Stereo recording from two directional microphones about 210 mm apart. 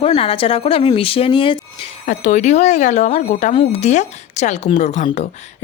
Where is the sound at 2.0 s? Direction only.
35° left (ahead or behind).